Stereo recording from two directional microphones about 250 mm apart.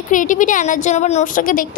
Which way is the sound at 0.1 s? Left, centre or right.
Left.